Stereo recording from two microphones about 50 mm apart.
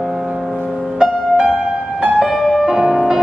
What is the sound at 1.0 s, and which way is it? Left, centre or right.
Music, centre.